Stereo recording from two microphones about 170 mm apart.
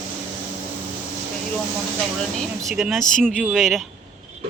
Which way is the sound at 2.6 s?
5° right (ahead or behind).